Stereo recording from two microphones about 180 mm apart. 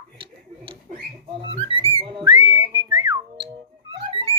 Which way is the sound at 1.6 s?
30° right (ahead or behind).